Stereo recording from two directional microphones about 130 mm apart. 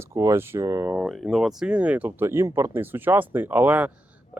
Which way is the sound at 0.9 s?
5° right (ahead or behind).